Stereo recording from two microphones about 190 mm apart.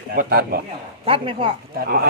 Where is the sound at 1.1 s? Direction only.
30° right (ahead or behind).